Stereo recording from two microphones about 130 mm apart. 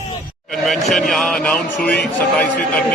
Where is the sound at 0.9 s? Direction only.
Centre (ahead or behind).